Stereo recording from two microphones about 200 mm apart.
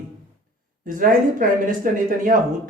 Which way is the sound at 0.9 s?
45° right (ahead or behind).